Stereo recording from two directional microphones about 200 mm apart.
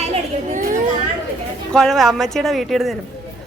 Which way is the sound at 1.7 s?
Centre (ahead or behind).